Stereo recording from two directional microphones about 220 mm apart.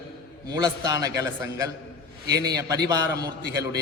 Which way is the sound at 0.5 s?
15° right (ahead or behind).